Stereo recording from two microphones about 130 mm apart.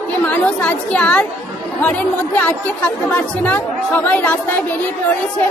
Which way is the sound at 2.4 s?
10° left (ahead or behind).